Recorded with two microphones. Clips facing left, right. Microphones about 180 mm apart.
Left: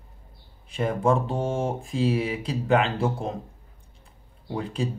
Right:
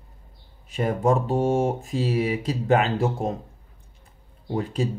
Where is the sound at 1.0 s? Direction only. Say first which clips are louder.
Right 2 dB; 40° right (ahead or behind).